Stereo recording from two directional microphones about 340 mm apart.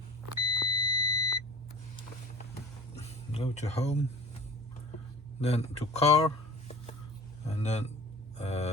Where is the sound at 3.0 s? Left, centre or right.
Centre.